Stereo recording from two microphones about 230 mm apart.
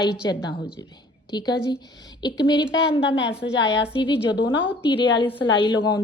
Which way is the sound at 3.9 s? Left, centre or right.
Left.